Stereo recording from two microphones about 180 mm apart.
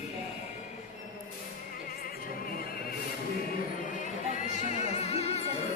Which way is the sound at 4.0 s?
45° left (ahead or behind).